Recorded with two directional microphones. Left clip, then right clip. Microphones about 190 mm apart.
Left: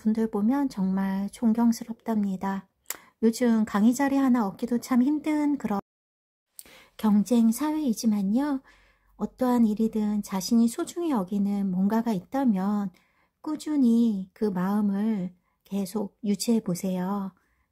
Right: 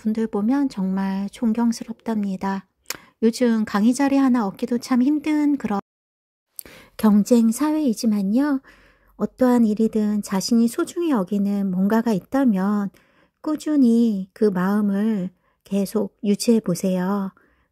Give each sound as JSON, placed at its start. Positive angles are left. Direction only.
{"t": 0.0, "sound": "speech", "side_deg": -15}
{"t": 6.5, "sound": "a sound", "side_deg": -30}
{"t": 7.2, "sound": "speech", "side_deg": -25}